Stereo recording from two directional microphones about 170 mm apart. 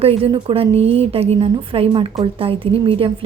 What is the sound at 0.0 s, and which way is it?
A woman's voice, 35° right (ahead or behind).